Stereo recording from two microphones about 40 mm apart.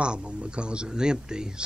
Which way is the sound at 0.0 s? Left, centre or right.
Right.